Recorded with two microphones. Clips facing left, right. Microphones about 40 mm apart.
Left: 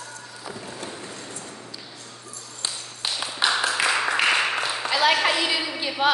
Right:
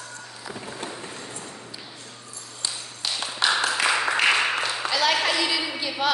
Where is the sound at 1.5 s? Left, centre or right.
Centre.